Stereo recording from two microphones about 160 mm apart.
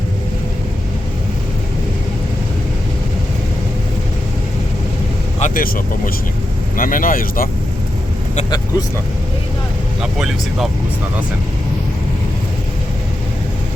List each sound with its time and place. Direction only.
5.4 s speech: 65° left (ahead or behind)
8.4 s speech: 25° left (ahead or behind)
10.0 s speech: 5° right (ahead or behind)